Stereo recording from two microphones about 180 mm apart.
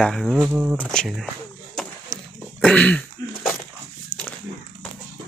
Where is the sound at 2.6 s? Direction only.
5° left (ahead or behind).